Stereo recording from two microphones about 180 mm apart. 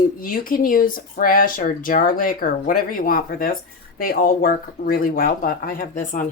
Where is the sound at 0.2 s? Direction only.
50° left (ahead or behind).